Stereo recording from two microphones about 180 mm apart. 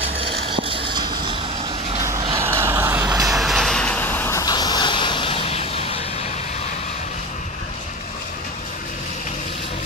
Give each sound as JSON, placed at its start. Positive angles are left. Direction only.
{"t": 0.6, "sound": "a sound", "side_deg": -30}
{"t": 2.0, "sound": "vehicle", "side_deg": -15}
{"t": 3.3, "sound": "vehicle", "side_deg": 0}